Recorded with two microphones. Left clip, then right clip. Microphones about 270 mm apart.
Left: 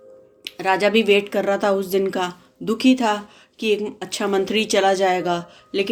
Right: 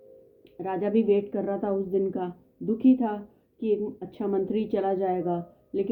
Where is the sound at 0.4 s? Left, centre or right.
Centre.